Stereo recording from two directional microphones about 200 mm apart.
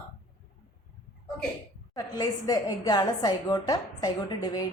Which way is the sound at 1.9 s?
20° left (ahead or behind).